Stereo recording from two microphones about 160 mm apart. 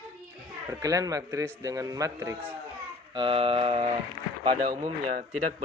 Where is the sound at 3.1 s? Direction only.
35° right (ahead or behind).